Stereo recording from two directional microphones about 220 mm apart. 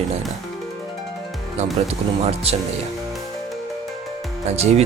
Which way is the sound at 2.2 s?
30° right (ahead or behind).